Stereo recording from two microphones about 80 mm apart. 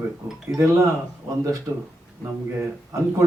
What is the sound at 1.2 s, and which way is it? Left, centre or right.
Speech, right.